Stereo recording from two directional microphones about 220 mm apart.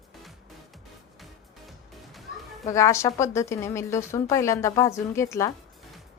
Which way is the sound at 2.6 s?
15° left (ahead or behind).